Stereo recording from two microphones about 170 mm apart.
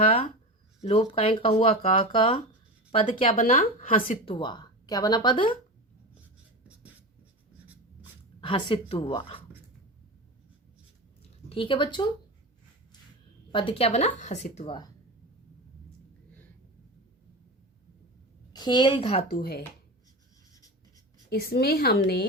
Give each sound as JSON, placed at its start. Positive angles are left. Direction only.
{"t": 0.1, "sound": "speech", "side_deg": 35}
{"t": 4.3, "sound": "speech", "side_deg": 30}
{"t": 8.4, "sound": "speech", "side_deg": 30}
{"t": 11.4, "sound": "speech", "side_deg": 30}
{"t": 13.5, "sound": "speech", "side_deg": 30}
{"t": 18.5, "sound": "a woman's voice", "side_deg": 25}
{"t": 19.3, "sound": "speech", "side_deg": 65}
{"t": 21.2, "sound": "speech", "side_deg": 70}